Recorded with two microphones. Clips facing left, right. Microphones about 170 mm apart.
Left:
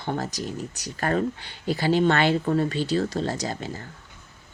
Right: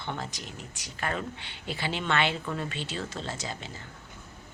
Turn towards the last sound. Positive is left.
turn(degrees=40)  # may be behind; listen again after turning